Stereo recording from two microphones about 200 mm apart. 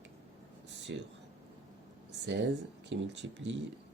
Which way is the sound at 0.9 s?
65° right (ahead or behind).